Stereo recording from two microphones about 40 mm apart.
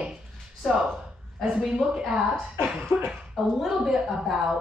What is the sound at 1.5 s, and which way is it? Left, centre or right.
Speech, centre.